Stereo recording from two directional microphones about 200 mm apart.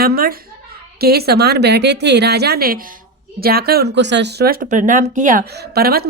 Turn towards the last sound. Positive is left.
turn(degrees=-50)  # may be behind; listen again after turning